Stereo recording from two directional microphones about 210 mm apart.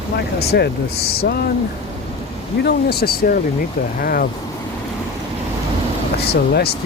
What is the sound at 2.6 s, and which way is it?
Speech, 50° left (ahead or behind).